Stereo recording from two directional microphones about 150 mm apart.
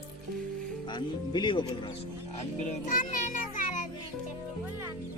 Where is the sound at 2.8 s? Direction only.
60° left (ahead or behind).